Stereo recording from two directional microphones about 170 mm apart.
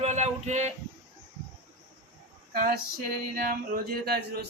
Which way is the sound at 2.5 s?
60° right (ahead or behind).